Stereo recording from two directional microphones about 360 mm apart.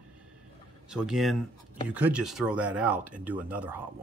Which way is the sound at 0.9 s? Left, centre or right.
Centre.